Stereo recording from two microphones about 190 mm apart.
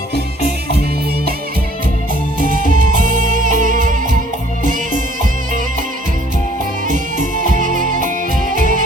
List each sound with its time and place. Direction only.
2.7 s music: 45° right (ahead or behind)
6.8 s music: 40° right (ahead or behind)